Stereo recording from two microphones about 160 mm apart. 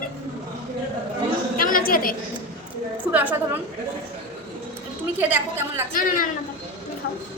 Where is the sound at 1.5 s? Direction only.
65° left (ahead or behind).